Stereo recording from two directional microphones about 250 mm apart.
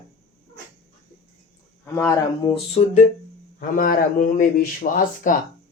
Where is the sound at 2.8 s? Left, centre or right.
Left.